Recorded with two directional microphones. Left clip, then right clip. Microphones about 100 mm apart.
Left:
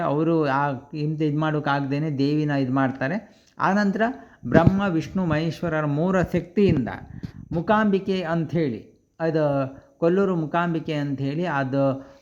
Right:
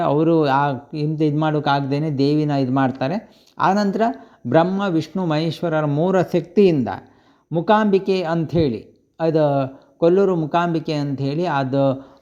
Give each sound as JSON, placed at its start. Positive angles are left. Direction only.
{"t": 0.0, "sound": "speech", "side_deg": -30}
{"t": 4.8, "sound": "a man's voice", "side_deg": -10}
{"t": 5.3, "sound": "speech", "side_deg": -20}
{"t": 10.5, "sound": "speech", "side_deg": -30}